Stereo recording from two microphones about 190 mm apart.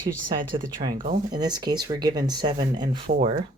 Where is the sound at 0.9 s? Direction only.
45° right (ahead or behind).